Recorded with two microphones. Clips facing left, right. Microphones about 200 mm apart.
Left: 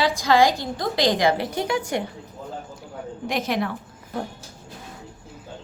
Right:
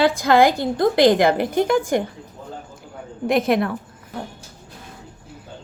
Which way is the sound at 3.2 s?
55° right (ahead or behind).